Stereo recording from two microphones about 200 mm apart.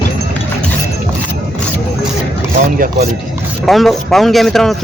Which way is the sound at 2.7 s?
45° right (ahead or behind).